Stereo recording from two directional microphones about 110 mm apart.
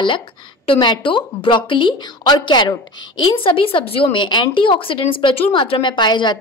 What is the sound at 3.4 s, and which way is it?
A woman's voice, 55° left (ahead or behind).